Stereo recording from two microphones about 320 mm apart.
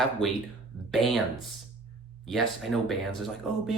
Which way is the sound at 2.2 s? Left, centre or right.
Centre.